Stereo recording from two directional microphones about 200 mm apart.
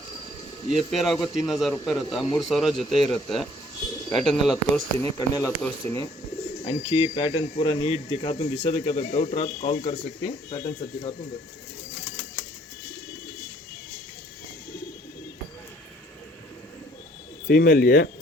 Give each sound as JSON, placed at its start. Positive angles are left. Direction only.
{"t": 0.7, "sound": "speech", "side_deg": 0}
{"t": 5.1, "sound": "speech", "side_deg": 15}
{"t": 6.7, "sound": "speech", "side_deg": 25}
{"t": 17.5, "sound": "speech", "side_deg": 50}